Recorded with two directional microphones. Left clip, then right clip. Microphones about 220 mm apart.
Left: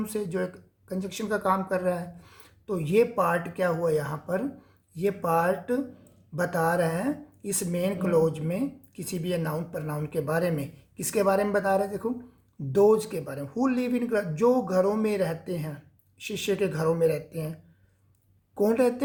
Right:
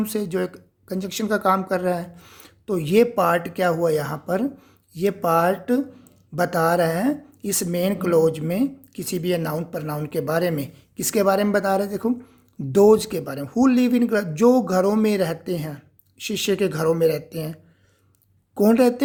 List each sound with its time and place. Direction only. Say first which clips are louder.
0.0 s speech: right 5 dB; 35° right (ahead or behind)